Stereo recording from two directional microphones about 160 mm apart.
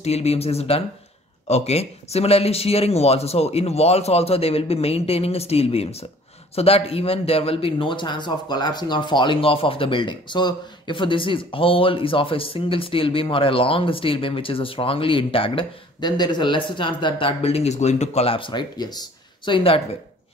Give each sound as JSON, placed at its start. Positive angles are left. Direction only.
{"t": 0.0, "sound": "speech", "side_deg": 40}